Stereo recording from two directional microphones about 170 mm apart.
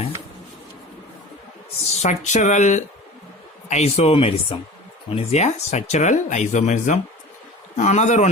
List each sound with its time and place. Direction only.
2.0 s speech: 45° left (ahead or behind)